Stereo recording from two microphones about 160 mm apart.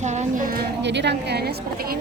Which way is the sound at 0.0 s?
45° right (ahead or behind).